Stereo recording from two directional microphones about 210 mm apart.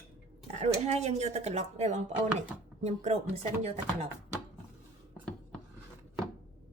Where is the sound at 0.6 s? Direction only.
30° right (ahead or behind).